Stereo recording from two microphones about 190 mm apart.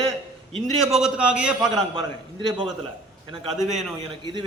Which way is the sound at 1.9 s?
25° right (ahead or behind).